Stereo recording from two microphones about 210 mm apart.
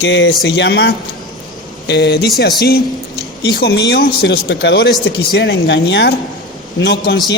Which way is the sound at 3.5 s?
50° left (ahead or behind).